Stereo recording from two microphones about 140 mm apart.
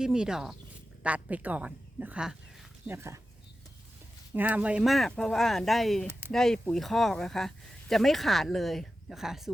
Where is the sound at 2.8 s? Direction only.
20° right (ahead or behind).